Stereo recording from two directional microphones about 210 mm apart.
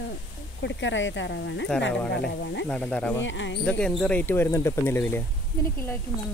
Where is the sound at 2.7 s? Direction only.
5° left (ahead or behind).